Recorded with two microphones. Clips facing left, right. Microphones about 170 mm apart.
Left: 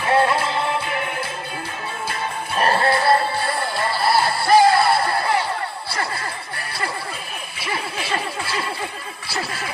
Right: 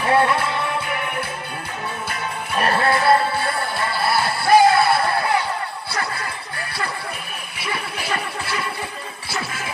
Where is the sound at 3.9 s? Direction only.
55° right (ahead or behind).